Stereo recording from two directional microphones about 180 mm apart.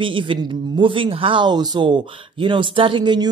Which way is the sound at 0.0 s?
30° right (ahead or behind).